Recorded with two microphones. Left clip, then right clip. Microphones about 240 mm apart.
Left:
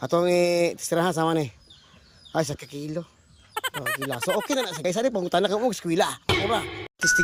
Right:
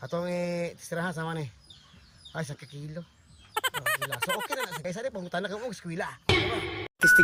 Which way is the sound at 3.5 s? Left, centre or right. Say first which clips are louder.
Even; centre.